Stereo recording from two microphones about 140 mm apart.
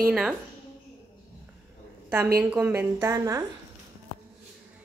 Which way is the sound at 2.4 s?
10° right (ahead or behind).